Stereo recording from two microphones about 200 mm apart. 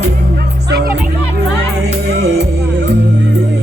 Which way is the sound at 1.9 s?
55° right (ahead or behind).